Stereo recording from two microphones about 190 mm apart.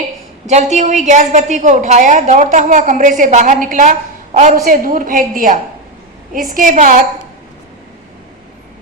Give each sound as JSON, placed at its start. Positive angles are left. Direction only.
{"t": 0.4, "sound": "a woman's voice", "side_deg": -40}